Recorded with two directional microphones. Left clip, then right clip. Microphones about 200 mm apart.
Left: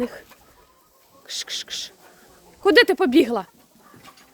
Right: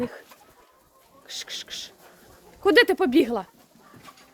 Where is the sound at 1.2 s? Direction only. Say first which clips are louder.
Left 5 dB; 25° left (ahead or behind).